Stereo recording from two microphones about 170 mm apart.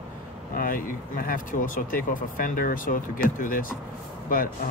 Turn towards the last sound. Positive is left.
turn(degrees=55)  # may be behind; listen again after turning